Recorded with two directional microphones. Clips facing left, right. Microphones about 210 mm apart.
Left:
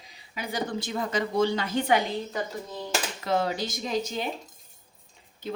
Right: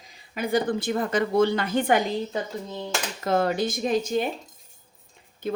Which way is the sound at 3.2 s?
55° right (ahead or behind).